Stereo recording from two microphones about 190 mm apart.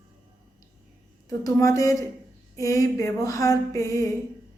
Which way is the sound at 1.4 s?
15° left (ahead or behind).